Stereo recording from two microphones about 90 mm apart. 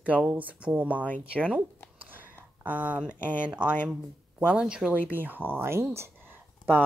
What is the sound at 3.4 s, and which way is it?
Speech, 10° right (ahead or behind).